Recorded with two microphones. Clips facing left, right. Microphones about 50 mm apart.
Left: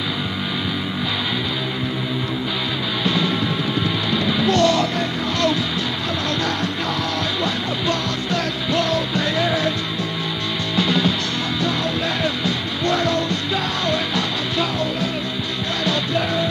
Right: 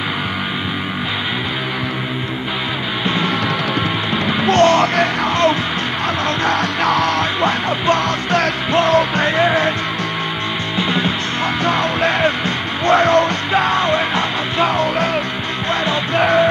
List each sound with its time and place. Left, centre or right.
4.5 s music: right
5.3 s music: right
10.8 s music: right
11.6 s music: right
16.2 s music: right